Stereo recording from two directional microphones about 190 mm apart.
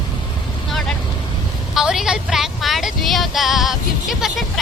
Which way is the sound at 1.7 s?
Centre (ahead or behind).